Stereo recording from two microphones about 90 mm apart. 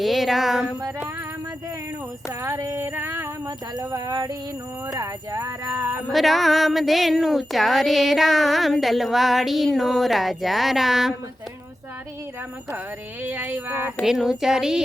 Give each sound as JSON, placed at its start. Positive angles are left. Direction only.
{"t": 0.0, "sound": "speech", "side_deg": 0}
{"t": 2.4, "sound": "female singing", "side_deg": -30}
{"t": 3.8, "sound": "a sound", "side_deg": -40}
{"t": 4.9, "sound": "speech", "side_deg": -35}
{"t": 5.7, "sound": "music", "side_deg": -20}
{"t": 6.1, "sound": "speech", "side_deg": 0}
{"t": 13.2, "sound": "music", "side_deg": -20}
{"t": 14.0, "sound": "speech", "side_deg": -5}